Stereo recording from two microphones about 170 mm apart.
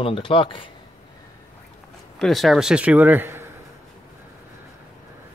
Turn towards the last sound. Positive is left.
turn(degrees=-10)  # may be behind; listen again after turning